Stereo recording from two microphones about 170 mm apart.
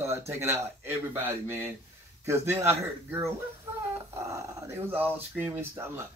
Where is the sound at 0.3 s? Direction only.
15° right (ahead or behind).